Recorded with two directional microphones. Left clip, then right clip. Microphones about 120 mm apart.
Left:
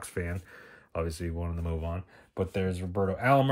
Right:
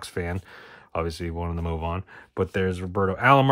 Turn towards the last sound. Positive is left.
turn(degrees=-55)  # may be behind; listen again after turning